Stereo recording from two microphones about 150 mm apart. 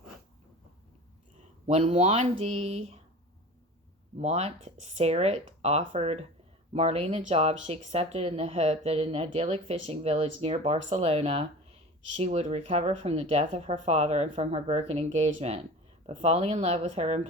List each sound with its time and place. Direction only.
1.6 s speech: 50° right (ahead or behind)
4.2 s speech: 45° right (ahead or behind)